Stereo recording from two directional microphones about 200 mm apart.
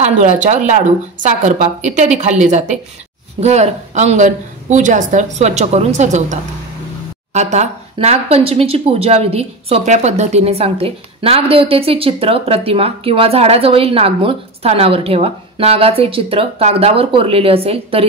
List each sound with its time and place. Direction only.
0.0 s a woman's voice: 35° right (ahead or behind)
7.3 s speech: 35° right (ahead or behind)